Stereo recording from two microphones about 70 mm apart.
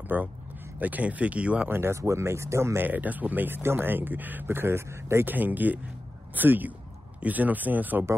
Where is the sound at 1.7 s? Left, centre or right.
Right.